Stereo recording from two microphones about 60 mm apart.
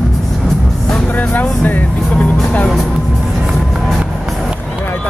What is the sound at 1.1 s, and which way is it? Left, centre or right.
Music, left.